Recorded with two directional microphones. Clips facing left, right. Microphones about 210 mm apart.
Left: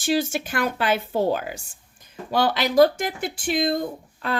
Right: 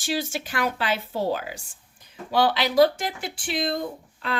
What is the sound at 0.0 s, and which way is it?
Speech, 50° left (ahead or behind).